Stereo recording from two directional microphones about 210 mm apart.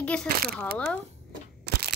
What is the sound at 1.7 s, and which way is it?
Single-lens reflex camera, 50° right (ahead or behind).